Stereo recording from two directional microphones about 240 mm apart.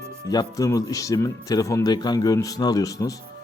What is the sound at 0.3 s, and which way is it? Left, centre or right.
Speech, centre.